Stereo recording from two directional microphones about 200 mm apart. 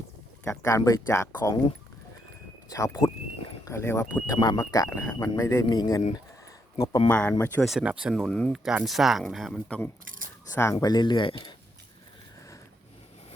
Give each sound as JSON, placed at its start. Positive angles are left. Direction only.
{"t": 0.6, "sound": "speech", "side_deg": 15}
{"t": 2.6, "sound": "speech", "side_deg": 15}
{"t": 7.1, "sound": "speech", "side_deg": 10}